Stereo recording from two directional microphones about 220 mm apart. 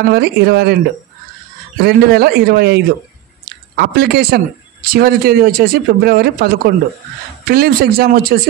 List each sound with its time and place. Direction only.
0.1 s speech: 50° right (ahead or behind)
1.8 s speech: 45° right (ahead or behind)